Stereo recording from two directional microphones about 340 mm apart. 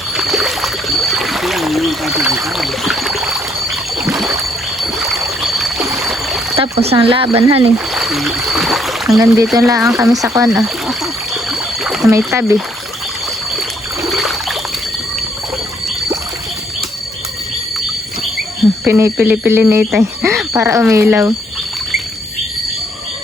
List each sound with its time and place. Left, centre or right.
0.2 s boat: centre
4.0 s rowboat: centre
4.8 s boat: centre
6.6 s speech: centre
7.9 s a sound: centre
13.6 s trickle: centre
18.9 s speech: centre